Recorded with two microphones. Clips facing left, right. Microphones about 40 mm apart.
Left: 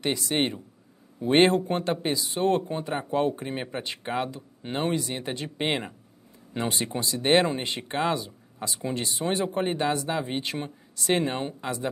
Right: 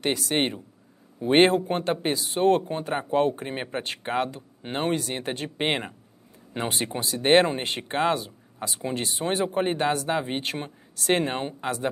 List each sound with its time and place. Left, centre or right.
0.0 s speech: right
2.1 s speech: right
5.6 s speech: centre